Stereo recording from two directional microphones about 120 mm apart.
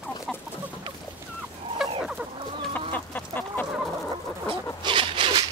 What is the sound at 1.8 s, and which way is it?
Chicken, 5° right (ahead or behind).